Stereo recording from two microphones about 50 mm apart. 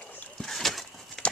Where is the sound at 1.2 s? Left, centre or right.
Centre.